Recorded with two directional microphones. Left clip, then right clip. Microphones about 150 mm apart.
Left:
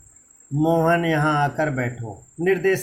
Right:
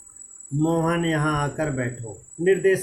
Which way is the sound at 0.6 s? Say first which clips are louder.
Left 4 dB; 65° left (ahead or behind).